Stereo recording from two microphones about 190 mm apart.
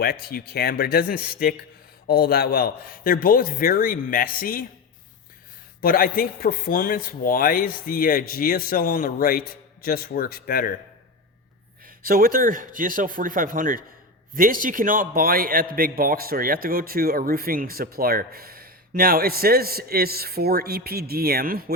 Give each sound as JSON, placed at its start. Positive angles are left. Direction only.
{"t": 0.0, "sound": "a man's voice", "side_deg": 55}
{"t": 5.8, "sound": "a man's voice", "side_deg": 50}
{"t": 11.9, "sound": "a man's voice", "side_deg": -50}